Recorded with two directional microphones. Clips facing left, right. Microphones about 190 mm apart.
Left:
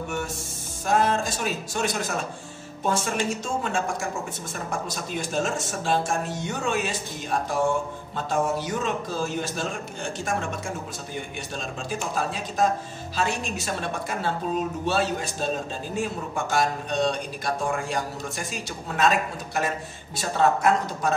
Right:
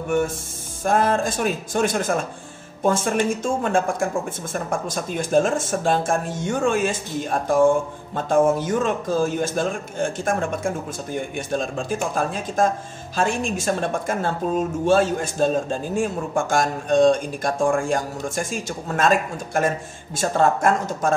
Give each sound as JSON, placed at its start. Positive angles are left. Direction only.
{"t": 0.8, "sound": "a woman's voice", "side_deg": -50}